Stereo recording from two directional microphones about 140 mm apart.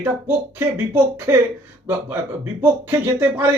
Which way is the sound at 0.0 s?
15° right (ahead or behind).